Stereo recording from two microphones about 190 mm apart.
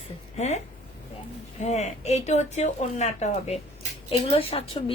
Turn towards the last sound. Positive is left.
turn(degrees=30)  # may be behind; listen again after turning